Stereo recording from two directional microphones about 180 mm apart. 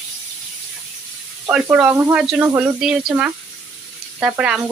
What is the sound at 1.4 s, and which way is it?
Speech, 5° right (ahead or behind).